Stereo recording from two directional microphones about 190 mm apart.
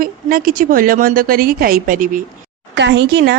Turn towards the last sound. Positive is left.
turn(degrees=-60)  # may be behind; listen again after turning